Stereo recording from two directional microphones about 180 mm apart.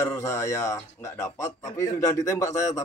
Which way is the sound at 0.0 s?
15° left (ahead or behind).